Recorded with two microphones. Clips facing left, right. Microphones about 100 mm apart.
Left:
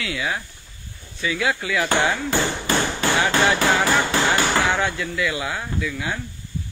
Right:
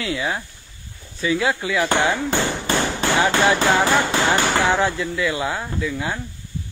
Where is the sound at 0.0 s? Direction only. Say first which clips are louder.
Right 2 dB; 30° right (ahead or behind).